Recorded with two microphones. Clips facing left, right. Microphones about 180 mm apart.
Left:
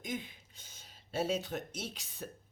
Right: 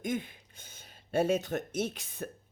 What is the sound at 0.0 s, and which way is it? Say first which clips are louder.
Speech: right 6 dB; 50° right (ahead or behind).